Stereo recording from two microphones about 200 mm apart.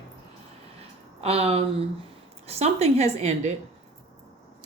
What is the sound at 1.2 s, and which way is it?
Speech, 30° right (ahead or behind).